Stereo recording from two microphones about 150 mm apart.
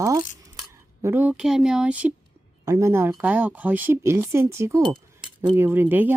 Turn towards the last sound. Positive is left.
turn(degrees=-15)  # may be behind; listen again after turning